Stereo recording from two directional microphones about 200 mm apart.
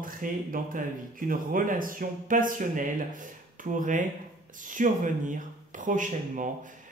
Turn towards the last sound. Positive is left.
turn(degrees=-40)  # may be behind; listen again after turning